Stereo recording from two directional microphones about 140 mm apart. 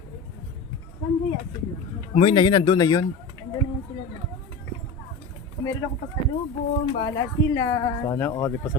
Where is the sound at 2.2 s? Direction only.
35° left (ahead or behind).